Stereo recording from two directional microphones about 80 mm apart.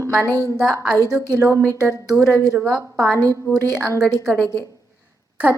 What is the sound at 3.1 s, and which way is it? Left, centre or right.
Speech, right.